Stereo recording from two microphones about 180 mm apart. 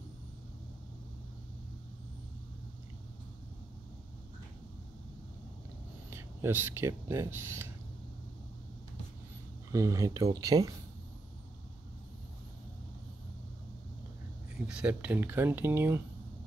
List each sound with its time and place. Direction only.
6.0 s speech: 15° right (ahead or behind)
9.7 s speech: 20° right (ahead or behind)
14.7 s speech: 5° right (ahead or behind)